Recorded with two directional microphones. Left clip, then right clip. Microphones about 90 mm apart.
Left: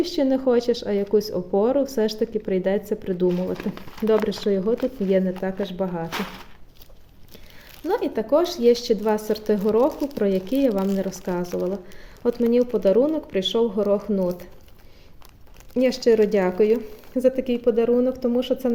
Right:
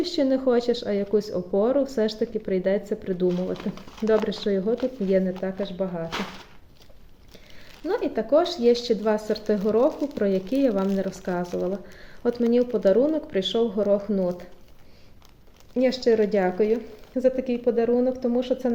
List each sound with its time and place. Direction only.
0.0 s a woman's voice: 30° left (ahead or behind); by 5.6 s 45° left (ahead or behind)
5.6 s speech: 65° left (ahead or behind)
7.9 s speech: 40° left (ahead or behind)
10.0 s a woman's voice: 45° left (ahead or behind)
10.2 s speech: 30° left (ahead or behind)
15.7 s a woman's voice: 50° left (ahead or behind)
17.2 s a woman's voice: 80° left; by 18.7 s 40° left (ahead or behind)